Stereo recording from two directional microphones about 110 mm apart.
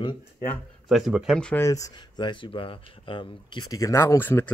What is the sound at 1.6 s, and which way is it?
Speech, 30° left (ahead or behind).